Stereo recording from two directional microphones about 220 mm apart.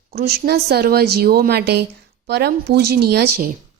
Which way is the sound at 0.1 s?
45° right (ahead or behind).